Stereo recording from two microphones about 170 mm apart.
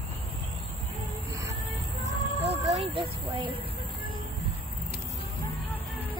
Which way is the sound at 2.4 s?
40° right (ahead or behind).